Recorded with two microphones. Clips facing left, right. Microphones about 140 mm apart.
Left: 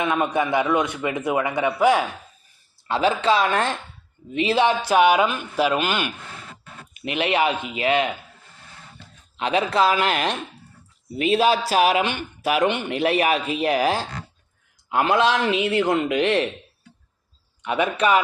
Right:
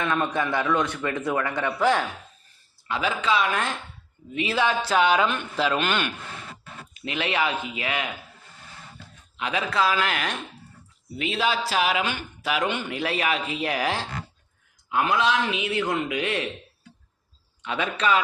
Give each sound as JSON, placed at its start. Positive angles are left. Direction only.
{"t": 0.0, "sound": "a man's voice", "side_deg": 15}
{"t": 2.8, "sound": "a man's voice", "side_deg": 30}
{"t": 9.4, "sound": "speech", "side_deg": 25}
{"t": 15.1, "sound": "a man's voice", "side_deg": 60}
{"t": 16.1, "sound": "speech", "side_deg": 30}
{"t": 17.6, "sound": "a man's voice", "side_deg": 15}